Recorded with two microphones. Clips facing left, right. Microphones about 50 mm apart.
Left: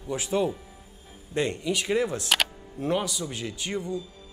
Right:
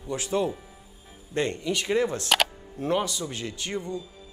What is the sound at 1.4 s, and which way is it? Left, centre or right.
Speech, centre.